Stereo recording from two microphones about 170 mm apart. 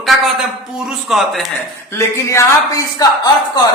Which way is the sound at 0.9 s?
Centre (ahead or behind).